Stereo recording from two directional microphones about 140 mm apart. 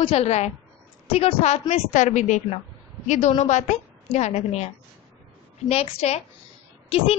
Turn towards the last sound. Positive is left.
turn(degrees=40)  # may be behind; listen again after turning